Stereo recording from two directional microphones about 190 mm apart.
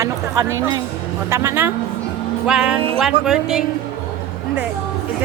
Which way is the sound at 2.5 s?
5° right (ahead or behind).